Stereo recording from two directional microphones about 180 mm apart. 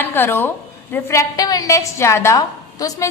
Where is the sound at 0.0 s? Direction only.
10° left (ahead or behind).